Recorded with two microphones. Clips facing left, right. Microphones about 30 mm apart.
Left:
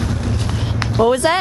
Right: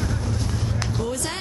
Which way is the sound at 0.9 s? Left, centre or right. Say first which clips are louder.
Left 17 dB; left.